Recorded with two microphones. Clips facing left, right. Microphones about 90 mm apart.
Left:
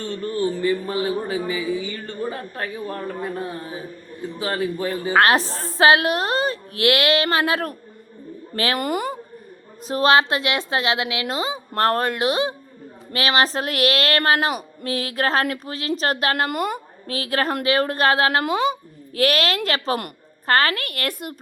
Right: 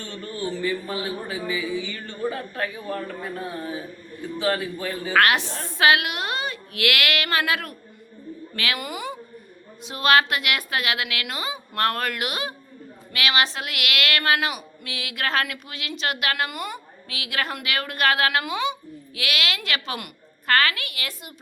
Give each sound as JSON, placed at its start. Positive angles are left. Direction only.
{"t": 0.3, "sound": "speech", "side_deg": 40}
{"t": 4.4, "sound": "speech", "side_deg": 25}
{"t": 9.8, "sound": "a woman's voice", "side_deg": 35}